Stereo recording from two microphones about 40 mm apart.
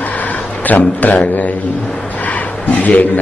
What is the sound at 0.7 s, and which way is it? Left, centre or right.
Speech, left.